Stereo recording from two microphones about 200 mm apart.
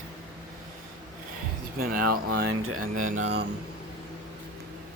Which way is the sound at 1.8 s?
45° right (ahead or behind).